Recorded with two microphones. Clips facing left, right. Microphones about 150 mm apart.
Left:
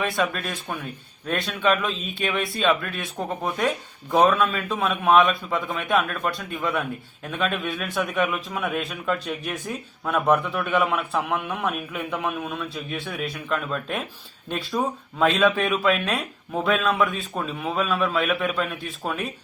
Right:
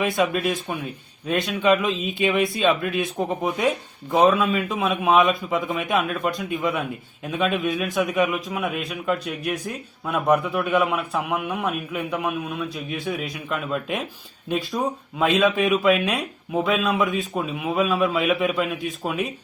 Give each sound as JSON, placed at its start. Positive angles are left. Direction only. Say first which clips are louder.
{"t": 0.0, "sound": "a man's voice", "louder": "right 4 dB", "side_deg": -15}